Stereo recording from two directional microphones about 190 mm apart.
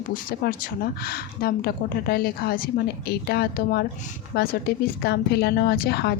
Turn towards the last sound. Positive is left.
turn(degrees=60)  # may be behind; listen again after turning